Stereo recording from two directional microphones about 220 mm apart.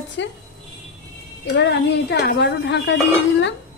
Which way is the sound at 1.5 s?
50° left (ahead or behind).